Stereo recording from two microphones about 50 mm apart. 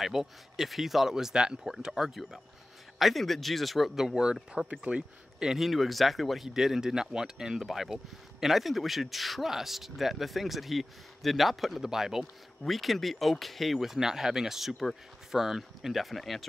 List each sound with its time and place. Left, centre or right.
0.0 s speech: centre; by 5.5 s right
5.5 s speech: centre